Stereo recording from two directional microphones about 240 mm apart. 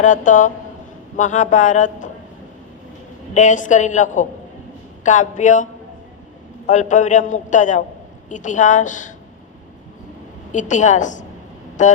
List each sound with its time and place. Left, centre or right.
0.0 s a man's voice: left
3.3 s a man's voice: left
6.7 s a man's voice: left
10.5 s a man's voice: left